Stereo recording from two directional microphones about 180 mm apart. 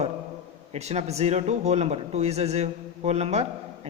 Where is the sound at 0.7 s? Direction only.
40° right (ahead or behind).